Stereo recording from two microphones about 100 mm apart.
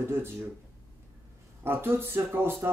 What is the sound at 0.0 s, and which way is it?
Speech, 25° right (ahead or behind).